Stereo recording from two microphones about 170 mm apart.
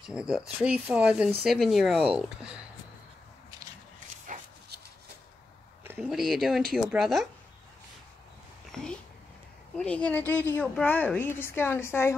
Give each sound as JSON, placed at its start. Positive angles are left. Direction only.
{"t": 0.0, "sound": "speech", "side_deg": -5}
{"t": 5.9, "sound": "speech", "side_deg": 0}
{"t": 8.7, "sound": "a woman's voice", "side_deg": 5}